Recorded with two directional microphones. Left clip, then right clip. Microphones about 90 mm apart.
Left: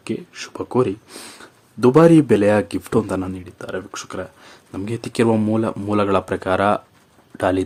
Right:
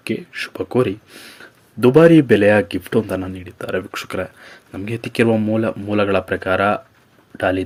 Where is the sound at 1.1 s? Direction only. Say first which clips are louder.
Left 1 dB; 65° left (ahead or behind).